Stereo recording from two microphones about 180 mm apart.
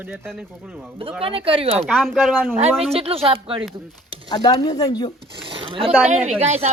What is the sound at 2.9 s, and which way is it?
Speech, 30° right (ahead or behind).